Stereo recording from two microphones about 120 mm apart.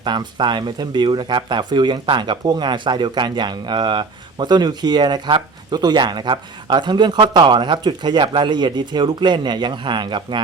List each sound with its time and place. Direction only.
0.0 s speech: 40° right (ahead or behind)